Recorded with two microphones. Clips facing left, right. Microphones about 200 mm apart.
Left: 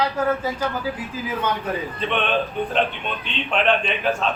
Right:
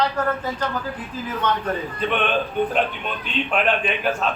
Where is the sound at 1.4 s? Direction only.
10° left (ahead or behind).